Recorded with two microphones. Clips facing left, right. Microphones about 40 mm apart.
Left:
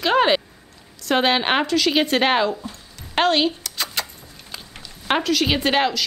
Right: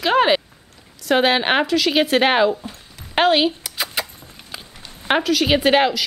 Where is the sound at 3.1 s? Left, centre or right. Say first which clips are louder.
Right 2 dB; centre.